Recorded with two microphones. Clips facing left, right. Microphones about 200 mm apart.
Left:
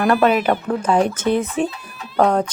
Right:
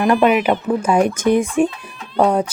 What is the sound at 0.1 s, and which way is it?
Speech, 10° right (ahead or behind).